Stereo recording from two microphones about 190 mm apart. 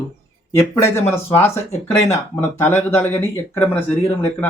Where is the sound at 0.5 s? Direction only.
15° left (ahead or behind).